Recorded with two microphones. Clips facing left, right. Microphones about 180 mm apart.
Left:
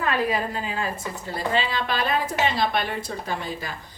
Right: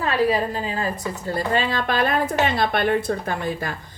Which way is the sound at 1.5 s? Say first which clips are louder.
Right 3 dB; 50° right (ahead or behind).